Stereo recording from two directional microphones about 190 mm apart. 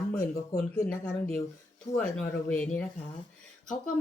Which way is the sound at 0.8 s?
5° left (ahead or behind).